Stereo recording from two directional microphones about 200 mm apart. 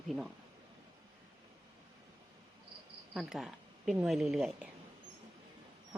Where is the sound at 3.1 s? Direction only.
Centre (ahead or behind).